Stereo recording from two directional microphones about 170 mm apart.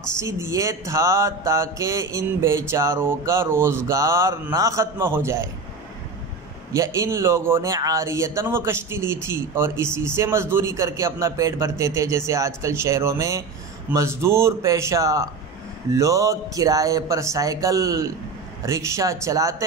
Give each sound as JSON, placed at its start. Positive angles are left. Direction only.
{"t": 0.5, "sound": "mantra", "side_deg": -15}
{"t": 6.7, "sound": "mantra", "side_deg": -15}
{"t": 15.9, "sound": "speech", "side_deg": -20}